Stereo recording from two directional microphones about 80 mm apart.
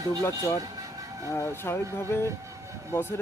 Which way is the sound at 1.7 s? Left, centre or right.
Left.